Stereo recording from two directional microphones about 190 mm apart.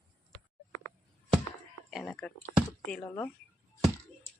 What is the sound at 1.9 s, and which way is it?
Speech, centre (ahead or behind).